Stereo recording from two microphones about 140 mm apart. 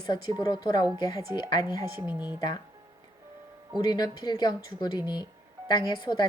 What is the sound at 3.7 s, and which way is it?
Speech, 30° left (ahead or behind).